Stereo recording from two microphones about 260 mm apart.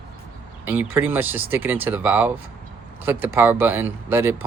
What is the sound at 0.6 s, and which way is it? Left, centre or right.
Speech, centre.